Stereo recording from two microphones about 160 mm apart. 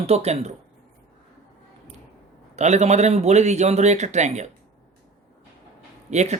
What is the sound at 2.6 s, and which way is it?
Speech, 45° right (ahead or behind).